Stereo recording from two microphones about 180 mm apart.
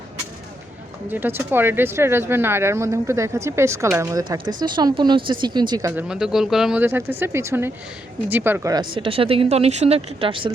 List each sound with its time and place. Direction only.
1.1 s speech: 10° right (ahead or behind)
6.0 s speech: 5° right (ahead or behind); by 10.5 s 30° right (ahead or behind)